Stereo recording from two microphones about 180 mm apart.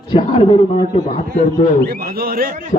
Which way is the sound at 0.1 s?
30° left (ahead or behind).